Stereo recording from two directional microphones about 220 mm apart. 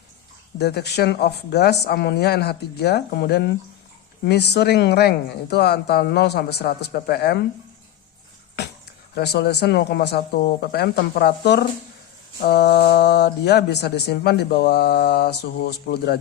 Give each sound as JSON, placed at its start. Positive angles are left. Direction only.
{"t": 0.6, "sound": "speech", "side_deg": 50}
{"t": 9.1, "sound": "speech", "side_deg": 50}